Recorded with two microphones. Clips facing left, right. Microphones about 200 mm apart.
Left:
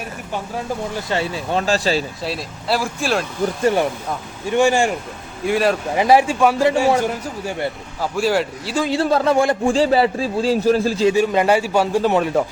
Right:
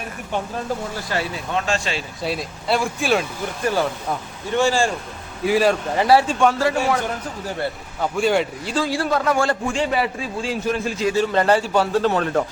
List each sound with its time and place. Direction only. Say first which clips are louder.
1.1 s a man's voice: left 3 dB; 30° left (ahead or behind)
2.2 s speech: even; centre (ahead or behind)
3.6 s speech: left 2 dB; 25° left (ahead or behind)
5.5 s speech: even; centre (ahead or behind)
5.9 s speech: left 2 dB; 15° left (ahead or behind)
8.1 s speech: left 1 dB; centre (ahead or behind)
8.7 s a man's voice: left 4 dB; 20° left (ahead or behind)
11.1 s speech: right 2 dB; 10° left (ahead or behind)